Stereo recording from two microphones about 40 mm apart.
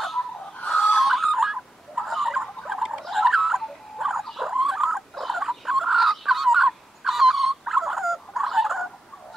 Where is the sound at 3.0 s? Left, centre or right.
Centre.